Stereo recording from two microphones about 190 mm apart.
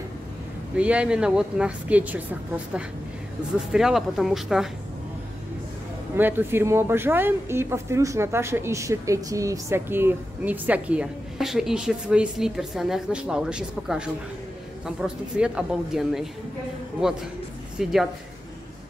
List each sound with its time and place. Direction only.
0.7 s speech: 5° right (ahead or behind)
6.1 s speech: 10° right (ahead or behind)